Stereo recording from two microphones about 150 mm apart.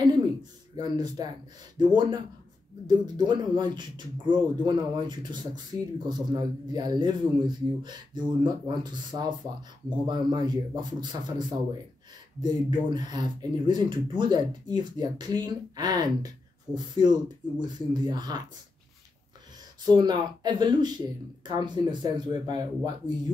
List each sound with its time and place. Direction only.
0.0 s a sound: 30° right (ahead or behind)
1.8 s speech: 30° right (ahead or behind)
12.4 s speech: 30° right (ahead or behind)
19.9 s speech: 30° right (ahead or behind)